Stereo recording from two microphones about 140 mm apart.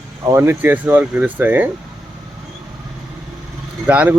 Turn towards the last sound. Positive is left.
turn(degrees=-10)  # may be behind; listen again after turning